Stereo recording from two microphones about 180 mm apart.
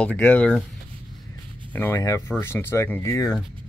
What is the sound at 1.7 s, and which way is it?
Speech, 15° left (ahead or behind).